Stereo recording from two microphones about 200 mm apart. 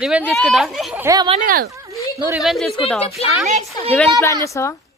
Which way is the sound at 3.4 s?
30° right (ahead or behind).